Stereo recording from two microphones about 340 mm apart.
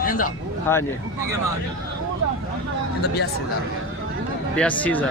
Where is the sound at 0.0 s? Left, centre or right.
Left.